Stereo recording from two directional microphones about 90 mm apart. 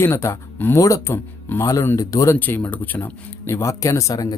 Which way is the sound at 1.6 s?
40° left (ahead or behind).